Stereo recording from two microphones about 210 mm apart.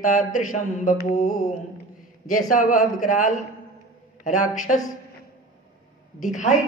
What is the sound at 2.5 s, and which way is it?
Mantra, 40° left (ahead or behind).